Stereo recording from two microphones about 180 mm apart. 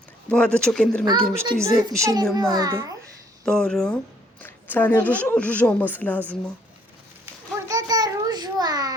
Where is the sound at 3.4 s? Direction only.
5° left (ahead or behind).